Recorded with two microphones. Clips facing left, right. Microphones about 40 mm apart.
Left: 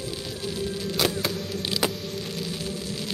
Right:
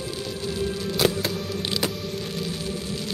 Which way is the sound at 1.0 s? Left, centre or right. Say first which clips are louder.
Right 5 dB; centre.